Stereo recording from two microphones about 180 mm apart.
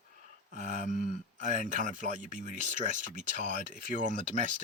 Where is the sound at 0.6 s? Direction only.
40° right (ahead or behind).